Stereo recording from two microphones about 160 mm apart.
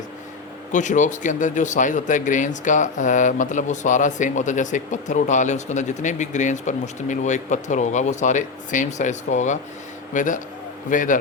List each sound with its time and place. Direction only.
0.7 s a man's voice: 50° left (ahead or behind)